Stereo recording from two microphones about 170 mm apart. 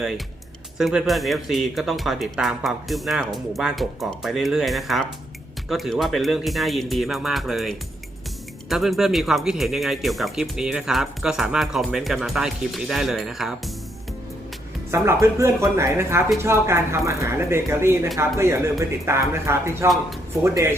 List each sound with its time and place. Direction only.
0.8 s speech: centre (ahead or behind)
14.8 s speech: 20° right (ahead or behind)